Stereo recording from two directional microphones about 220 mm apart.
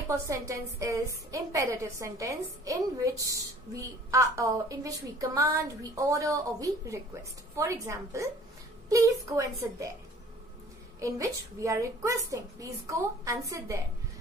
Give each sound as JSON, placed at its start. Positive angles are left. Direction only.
{"t": 0.1, "sound": "a woman's voice", "side_deg": -15}
{"t": 11.0, "sound": "a woman's voice", "side_deg": -15}